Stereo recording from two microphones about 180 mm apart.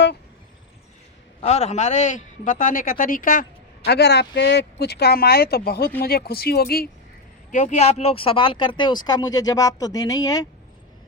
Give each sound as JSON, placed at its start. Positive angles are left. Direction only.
{"t": 1.4, "sound": "a man's voice", "side_deg": 35}
{"t": 3.8, "sound": "speech", "side_deg": 65}
{"t": 7.5, "sound": "speech", "side_deg": 40}